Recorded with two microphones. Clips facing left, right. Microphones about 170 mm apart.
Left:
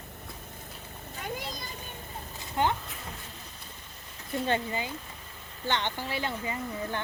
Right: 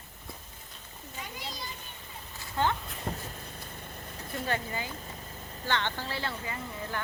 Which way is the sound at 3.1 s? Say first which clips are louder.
Right 10 dB; 50° right (ahead or behind).